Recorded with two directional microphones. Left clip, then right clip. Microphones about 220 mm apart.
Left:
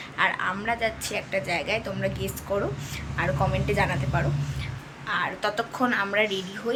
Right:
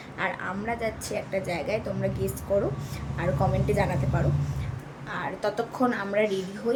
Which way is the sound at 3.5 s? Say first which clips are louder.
Left 1 dB; 5° right (ahead or behind).